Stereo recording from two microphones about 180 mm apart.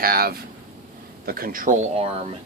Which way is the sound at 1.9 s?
35° right (ahead or behind).